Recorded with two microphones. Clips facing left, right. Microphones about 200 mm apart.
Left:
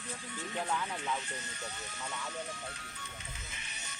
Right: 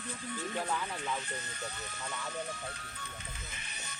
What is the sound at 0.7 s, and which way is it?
Speech, 5° right (ahead or behind).